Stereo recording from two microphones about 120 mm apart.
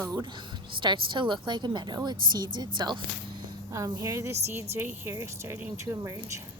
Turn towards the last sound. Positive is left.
turn(degrees=-25)  # may be behind; listen again after turning